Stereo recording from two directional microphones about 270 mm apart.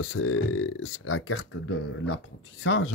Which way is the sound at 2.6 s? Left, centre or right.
Left.